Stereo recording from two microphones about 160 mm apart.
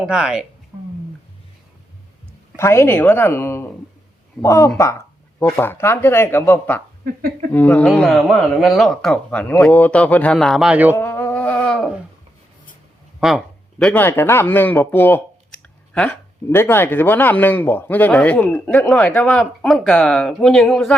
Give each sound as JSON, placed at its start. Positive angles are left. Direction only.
{"t": 0.0, "sound": "a woman's voice", "side_deg": -5}
{"t": 2.6, "sound": "speech", "side_deg": 15}
{"t": 4.8, "sound": "a sound", "side_deg": 20}
{"t": 5.5, "sound": "speech", "side_deg": 15}
{"t": 7.0, "sound": "speech", "side_deg": -60}
{"t": 7.5, "sound": "speech", "side_deg": 10}
{"t": 10.9, "sound": "a sound", "side_deg": 15}
{"t": 13.1, "sound": "speech", "side_deg": 0}